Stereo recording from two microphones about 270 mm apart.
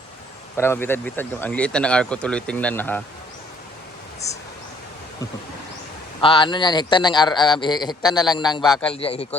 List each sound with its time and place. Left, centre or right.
0.5 s speech: centre
6.2 s a man's voice: centre
8.6 s speech: centre
8.9 s a man's voice: left